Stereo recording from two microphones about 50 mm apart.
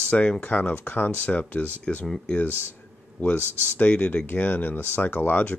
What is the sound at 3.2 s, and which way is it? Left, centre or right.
Speech, left.